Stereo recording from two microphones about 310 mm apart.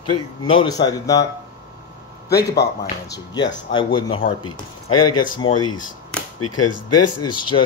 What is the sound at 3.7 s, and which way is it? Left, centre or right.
Speech, centre.